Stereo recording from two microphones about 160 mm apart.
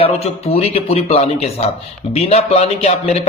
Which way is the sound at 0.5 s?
40° left (ahead or behind).